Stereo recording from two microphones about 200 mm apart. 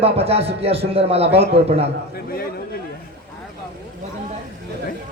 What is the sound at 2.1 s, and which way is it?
Speech, 50° left (ahead or behind).